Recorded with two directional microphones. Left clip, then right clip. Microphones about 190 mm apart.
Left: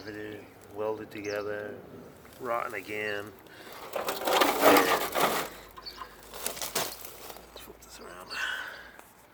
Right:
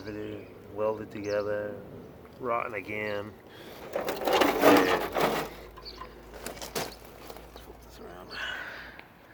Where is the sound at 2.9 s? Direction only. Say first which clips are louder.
Even; 20° right (ahead or behind).